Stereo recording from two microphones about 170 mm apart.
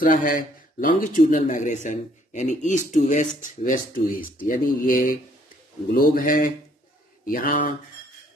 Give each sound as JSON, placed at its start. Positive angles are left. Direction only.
{"t": 0.0, "sound": "speech", "side_deg": 55}